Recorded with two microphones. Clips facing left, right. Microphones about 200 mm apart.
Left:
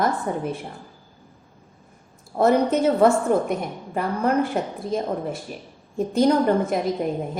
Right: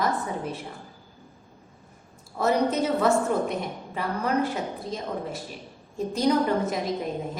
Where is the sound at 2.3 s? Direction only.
55° left (ahead or behind).